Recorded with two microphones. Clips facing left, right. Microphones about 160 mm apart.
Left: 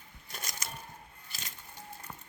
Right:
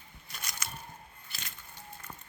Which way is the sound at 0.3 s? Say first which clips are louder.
Even; 45° left (ahead or behind).